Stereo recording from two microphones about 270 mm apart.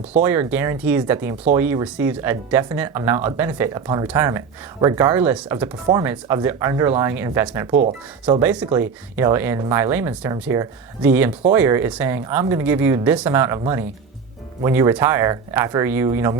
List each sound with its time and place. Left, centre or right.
0.2 s speech: centre
7.8 s speech: right
8.3 s speech: centre